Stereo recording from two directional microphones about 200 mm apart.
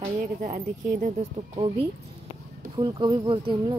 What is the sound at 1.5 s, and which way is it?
Speech, 30° right (ahead or behind).